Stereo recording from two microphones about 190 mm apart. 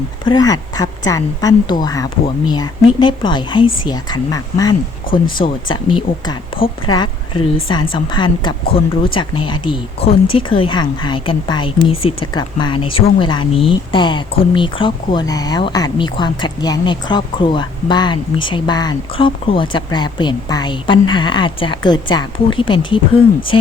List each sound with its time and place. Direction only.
0.3 s speech: 20° left (ahead or behind)
5.1 s speech: 50° left (ahead or behind)
5.7 s speech: 25° left (ahead or behind)